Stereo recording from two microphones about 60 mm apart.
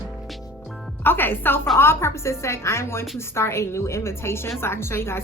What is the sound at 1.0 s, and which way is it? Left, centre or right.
A woman's voice, left.